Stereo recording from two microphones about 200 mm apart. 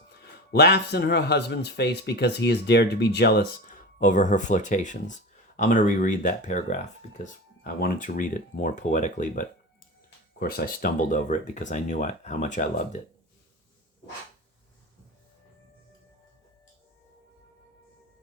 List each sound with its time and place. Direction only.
0.1 s speech: 55° left (ahead or behind); by 13.0 s 35° left (ahead or behind)